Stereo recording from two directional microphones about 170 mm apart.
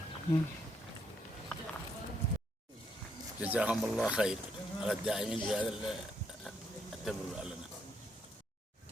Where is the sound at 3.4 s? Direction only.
10° right (ahead or behind).